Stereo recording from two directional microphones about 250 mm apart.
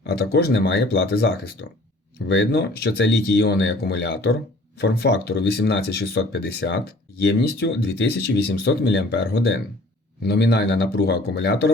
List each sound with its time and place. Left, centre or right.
0.0 s speech: left